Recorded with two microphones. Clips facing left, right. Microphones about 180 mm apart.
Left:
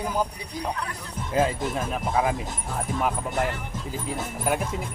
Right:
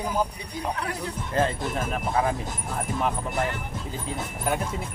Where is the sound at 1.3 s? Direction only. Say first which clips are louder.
Left 2 dB; 5° left (ahead or behind).